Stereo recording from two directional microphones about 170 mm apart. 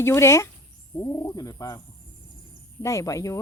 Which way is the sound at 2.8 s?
20° left (ahead or behind).